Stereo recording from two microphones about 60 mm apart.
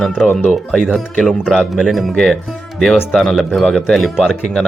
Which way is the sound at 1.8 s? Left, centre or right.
Centre.